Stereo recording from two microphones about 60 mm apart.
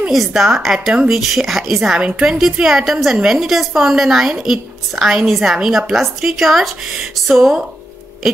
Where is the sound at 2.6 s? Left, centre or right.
Centre.